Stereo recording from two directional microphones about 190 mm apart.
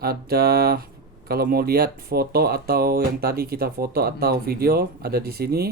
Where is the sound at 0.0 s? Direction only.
55° right (ahead or behind).